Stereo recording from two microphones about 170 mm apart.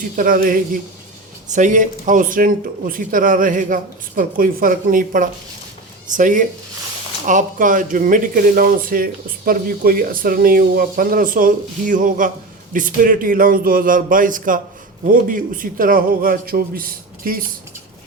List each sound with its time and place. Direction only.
0.2 s speech: 55° right (ahead or behind)